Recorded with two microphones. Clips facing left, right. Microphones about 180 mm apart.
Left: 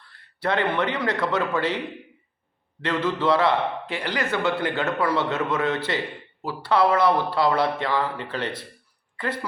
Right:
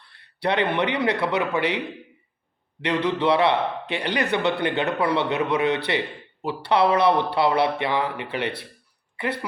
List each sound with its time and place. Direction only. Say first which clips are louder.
0.4 s a man's voice: right 1 dB; 20° right (ahead or behind)
2.8 s a man's voice: right 1 dB; 15° right (ahead or behind)